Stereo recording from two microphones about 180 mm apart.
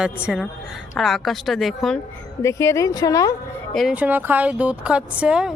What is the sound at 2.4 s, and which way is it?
Speech, 15° left (ahead or behind).